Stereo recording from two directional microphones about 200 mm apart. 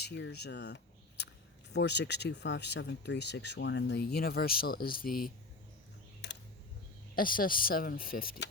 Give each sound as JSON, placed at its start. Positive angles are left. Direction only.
{"t": 0.0, "sound": "speech", "side_deg": 55}
{"t": 7.2, "sound": "speech", "side_deg": 45}